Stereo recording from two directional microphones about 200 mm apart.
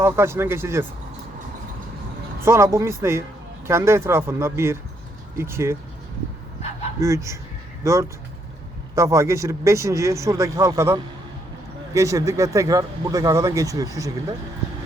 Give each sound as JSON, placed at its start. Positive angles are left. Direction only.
{"t": 0.0, "sound": "speech", "side_deg": -10}
{"t": 2.4, "sound": "speech", "side_deg": -15}
{"t": 7.0, "sound": "speech", "side_deg": -15}